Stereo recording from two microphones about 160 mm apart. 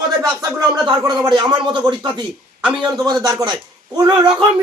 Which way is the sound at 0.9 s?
25° right (ahead or behind).